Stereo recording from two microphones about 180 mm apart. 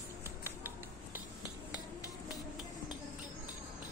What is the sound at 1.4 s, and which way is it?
Finger snapping, 20° left (ahead or behind).